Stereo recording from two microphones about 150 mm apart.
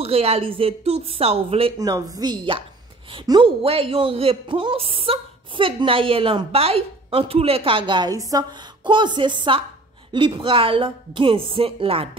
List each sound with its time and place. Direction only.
0.0 s a woman's voice: 40° right (ahead or behind)
1.8 s a woman's voice: 25° right (ahead or behind); by 12.1 s 40° right (ahead or behind)